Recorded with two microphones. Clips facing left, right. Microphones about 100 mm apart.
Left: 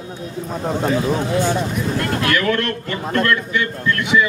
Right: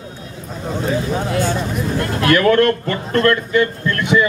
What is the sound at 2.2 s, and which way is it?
A man's voice, 40° right (ahead or behind).